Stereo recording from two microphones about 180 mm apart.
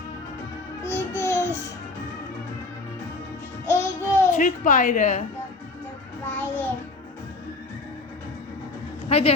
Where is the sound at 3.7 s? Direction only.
15° left (ahead or behind).